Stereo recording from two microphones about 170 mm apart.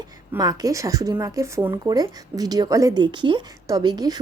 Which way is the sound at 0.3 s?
20° right (ahead or behind).